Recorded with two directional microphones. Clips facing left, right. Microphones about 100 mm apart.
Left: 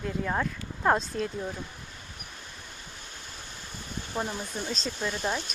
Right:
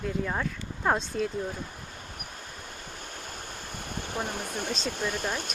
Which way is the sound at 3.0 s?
50° right (ahead or behind).